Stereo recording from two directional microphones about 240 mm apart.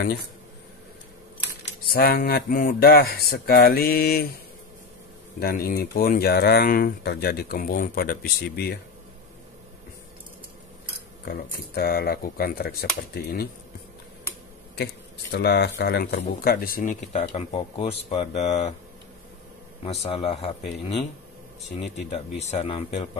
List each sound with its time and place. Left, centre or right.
1.9 s speech: left
5.4 s speech: left
11.7 s speech: left
15.3 s speech: left
19.8 s speech: left